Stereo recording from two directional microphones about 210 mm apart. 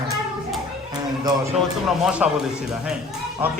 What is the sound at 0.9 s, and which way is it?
Music, 15° right (ahead or behind).